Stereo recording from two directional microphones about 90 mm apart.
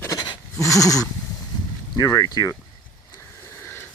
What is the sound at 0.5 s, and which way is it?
Speech, 35° left (ahead or behind).